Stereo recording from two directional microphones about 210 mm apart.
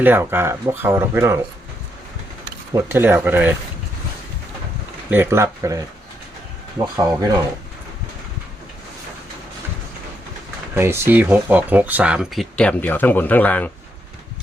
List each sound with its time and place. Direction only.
0.0 s speech: 10° right (ahead or behind)
2.7 s speech: 10° right (ahead or behind)
5.1 s speech: 10° right (ahead or behind)
6.9 s speech: 15° right (ahead or behind)
10.8 s speech: 10° right (ahead or behind); by 13.7 s 10° left (ahead or behind)